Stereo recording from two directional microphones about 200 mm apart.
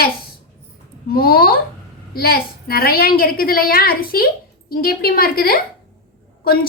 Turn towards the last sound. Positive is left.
turn(degrees=45)  # may be behind; listen again after turning